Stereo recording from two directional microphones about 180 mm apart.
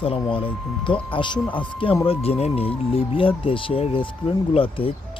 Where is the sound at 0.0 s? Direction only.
30° left (ahead or behind).